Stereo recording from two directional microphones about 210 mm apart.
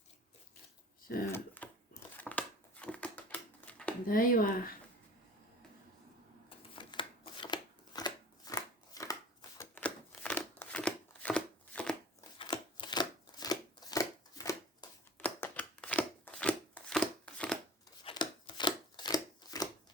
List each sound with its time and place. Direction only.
1.3 s crumpling: 10° left (ahead or behind)
4.0 s speech: 40° left (ahead or behind)
6.7 s scissors: 25° left (ahead or behind); by 11.9 s 5° left (ahead or behind)
12.4 s chopping: 25° left (ahead or behind)
15.2 s a sound: 5° left (ahead or behind)
18.0 s chopping: 20° left (ahead or behind)